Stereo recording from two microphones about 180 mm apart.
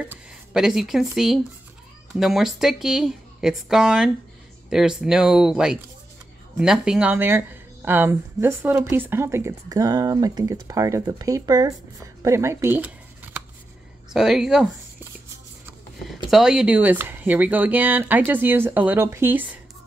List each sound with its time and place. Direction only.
0.0 s speech: 5° right (ahead or behind)
16.3 s speech: 5° right (ahead or behind)